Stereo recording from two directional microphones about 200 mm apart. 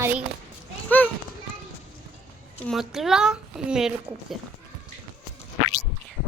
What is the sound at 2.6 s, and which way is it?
Speech, centre (ahead or behind).